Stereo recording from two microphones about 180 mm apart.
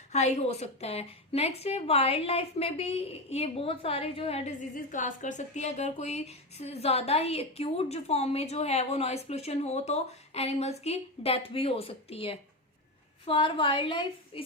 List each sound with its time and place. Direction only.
0.1 s speech: 40° left (ahead or behind)
4.7 s a woman's voice: 45° left (ahead or behind); by 14.4 s 30° left (ahead or behind)